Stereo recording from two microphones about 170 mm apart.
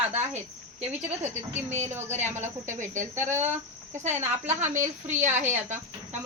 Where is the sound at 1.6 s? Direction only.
40° right (ahead or behind).